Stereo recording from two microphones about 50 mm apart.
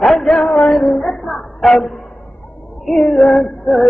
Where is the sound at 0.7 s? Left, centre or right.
Centre.